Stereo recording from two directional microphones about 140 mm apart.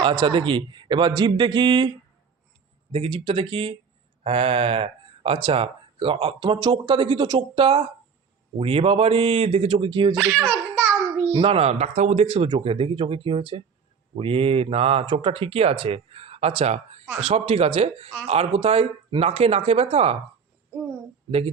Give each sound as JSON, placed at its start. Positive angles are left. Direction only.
{"t": 0.0, "sound": "speech", "side_deg": -35}
{"t": 2.9, "sound": "speech", "side_deg": -40}
{"t": 10.2, "sound": "a child's voice", "side_deg": -15}
{"t": 11.3, "sound": "speech", "side_deg": -35}
{"t": 21.2, "sound": "a man's voice", "side_deg": -45}